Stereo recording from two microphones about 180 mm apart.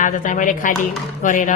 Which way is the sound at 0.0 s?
45° left (ahead or behind).